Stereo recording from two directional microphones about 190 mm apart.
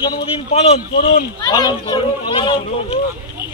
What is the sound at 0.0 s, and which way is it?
A man's voice, 25° left (ahead or behind).